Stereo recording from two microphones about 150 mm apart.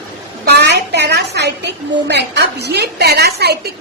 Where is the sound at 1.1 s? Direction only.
90° right.